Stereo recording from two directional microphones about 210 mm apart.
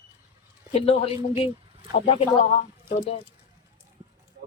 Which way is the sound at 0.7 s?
25° left (ahead or behind).